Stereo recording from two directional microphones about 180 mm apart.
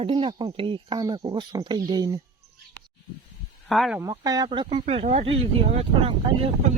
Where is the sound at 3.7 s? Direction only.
Centre (ahead or behind).